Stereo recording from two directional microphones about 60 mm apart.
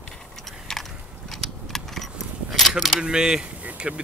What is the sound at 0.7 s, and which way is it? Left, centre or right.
Biting, centre.